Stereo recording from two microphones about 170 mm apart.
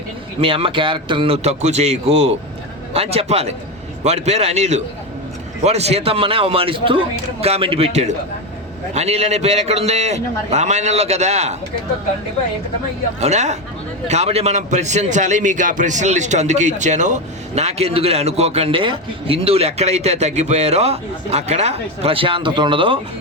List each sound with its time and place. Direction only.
0.3 s a man's voice: 30° right (ahead or behind)
13.1 s a man's voice: 40° right (ahead or behind)